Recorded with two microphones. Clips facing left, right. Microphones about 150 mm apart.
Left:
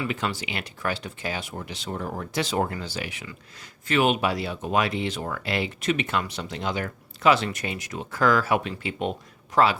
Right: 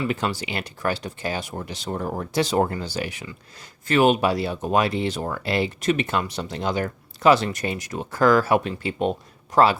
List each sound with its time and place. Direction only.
0.0 s speech: 40° right (ahead or behind)